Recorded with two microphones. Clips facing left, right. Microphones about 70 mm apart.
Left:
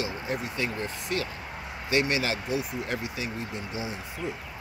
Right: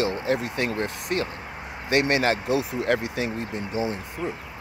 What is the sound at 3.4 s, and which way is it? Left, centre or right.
Speech, right.